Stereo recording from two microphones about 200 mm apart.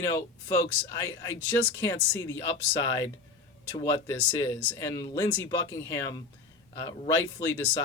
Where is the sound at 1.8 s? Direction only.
15° left (ahead or behind).